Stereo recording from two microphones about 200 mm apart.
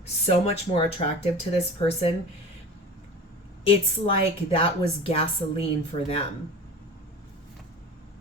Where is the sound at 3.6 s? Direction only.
25° left (ahead or behind).